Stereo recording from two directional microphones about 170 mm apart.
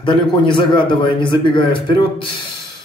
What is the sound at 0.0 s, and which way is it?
A man's voice, 30° left (ahead or behind).